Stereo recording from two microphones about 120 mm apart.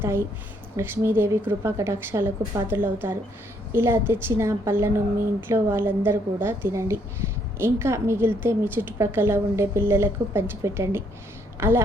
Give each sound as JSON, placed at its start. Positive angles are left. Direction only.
{"t": 0.0, "sound": "a woman's voice", "side_deg": -20}